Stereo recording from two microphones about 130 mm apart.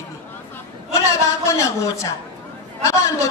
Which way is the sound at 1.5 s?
25° left (ahead or behind).